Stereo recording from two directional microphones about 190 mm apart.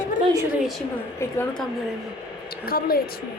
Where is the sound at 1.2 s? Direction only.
10° left (ahead or behind).